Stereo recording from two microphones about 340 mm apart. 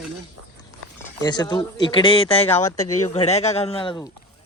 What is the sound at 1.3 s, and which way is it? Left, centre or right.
Speech, centre.